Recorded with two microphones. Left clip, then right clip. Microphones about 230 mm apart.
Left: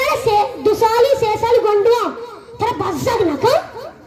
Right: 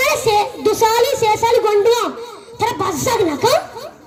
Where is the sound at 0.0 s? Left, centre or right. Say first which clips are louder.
Even; right.